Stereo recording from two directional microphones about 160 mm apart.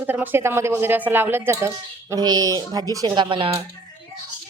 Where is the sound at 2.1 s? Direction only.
25° right (ahead or behind).